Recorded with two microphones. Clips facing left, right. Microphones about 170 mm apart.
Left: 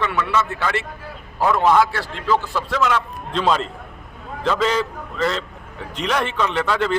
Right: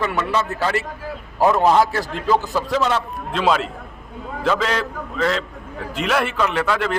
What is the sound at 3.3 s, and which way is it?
A man's voice, 5° right (ahead or behind).